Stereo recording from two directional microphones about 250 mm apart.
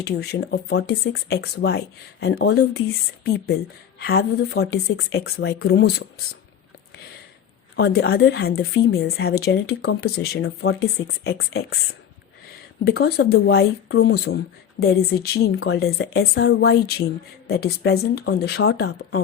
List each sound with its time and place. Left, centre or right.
0.0 s speech: left
7.8 s speech: left
12.8 s speech: left